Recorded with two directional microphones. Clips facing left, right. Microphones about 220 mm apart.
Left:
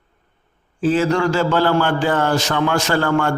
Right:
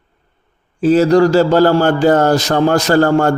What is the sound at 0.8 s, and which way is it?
A man's voice, 40° right (ahead or behind).